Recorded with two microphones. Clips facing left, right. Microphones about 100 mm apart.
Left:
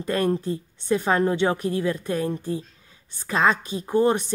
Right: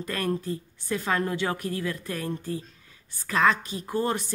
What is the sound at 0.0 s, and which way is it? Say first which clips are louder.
A woman's voice: left 6 dB; 25° left (ahead or behind).